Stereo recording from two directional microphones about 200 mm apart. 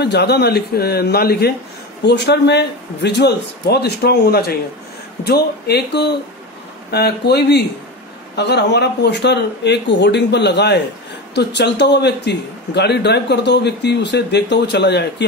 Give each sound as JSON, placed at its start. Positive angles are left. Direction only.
{"t": 0.0, "sound": "a man's voice", "side_deg": 55}